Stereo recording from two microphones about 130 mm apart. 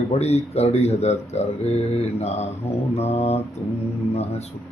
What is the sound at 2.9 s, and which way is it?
Mantra, 55° left (ahead or behind).